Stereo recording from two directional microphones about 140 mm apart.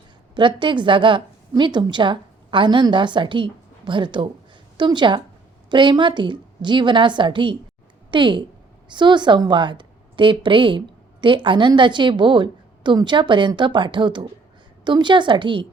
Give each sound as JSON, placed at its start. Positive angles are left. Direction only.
{"t": 0.3, "sound": "a woman's voice", "side_deg": -35}